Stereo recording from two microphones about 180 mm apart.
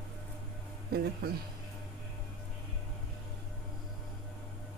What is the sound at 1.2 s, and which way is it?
Speech, 60° right (ahead or behind).